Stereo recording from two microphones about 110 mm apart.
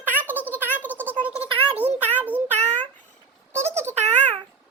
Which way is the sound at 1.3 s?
60° right (ahead or behind).